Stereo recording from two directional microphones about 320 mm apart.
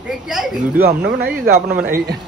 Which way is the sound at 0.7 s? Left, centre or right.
Right.